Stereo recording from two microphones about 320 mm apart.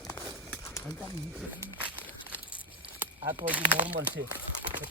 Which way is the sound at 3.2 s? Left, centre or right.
Centre.